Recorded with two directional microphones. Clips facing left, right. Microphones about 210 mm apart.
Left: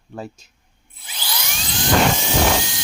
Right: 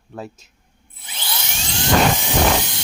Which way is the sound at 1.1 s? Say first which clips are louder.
Even; 25° right (ahead or behind).